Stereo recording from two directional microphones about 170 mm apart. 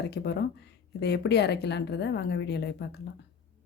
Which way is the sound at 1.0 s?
75° left (ahead or behind).